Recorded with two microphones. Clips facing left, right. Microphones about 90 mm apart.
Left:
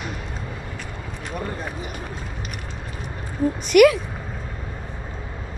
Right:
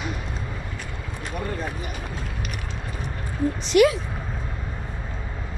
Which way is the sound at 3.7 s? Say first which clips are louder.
Left 4 dB; 70° left (ahead or behind).